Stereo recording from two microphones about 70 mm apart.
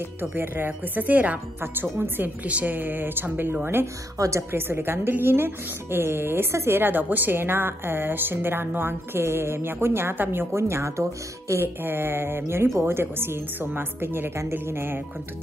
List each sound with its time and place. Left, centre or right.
0.2 s a woman's voice: right
4.2 s a woman's voice: right
4.5 s a woman's voice: right
6.8 s a woman's voice: right